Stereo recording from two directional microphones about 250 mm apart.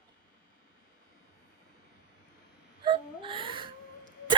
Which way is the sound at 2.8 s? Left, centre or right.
Right.